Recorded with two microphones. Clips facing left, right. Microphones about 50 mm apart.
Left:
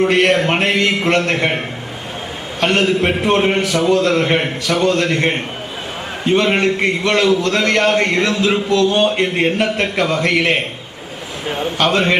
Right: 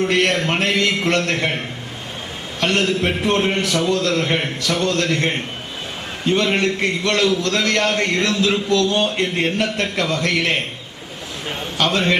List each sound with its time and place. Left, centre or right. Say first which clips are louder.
0.0 s a man's voice: left 4 dB; left